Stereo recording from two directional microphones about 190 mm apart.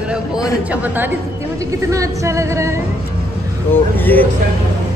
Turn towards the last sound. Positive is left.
turn(degrees=10)  # may be behind; listen again after turning